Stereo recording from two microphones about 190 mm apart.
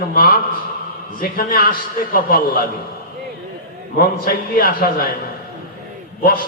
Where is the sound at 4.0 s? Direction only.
45° left (ahead or behind).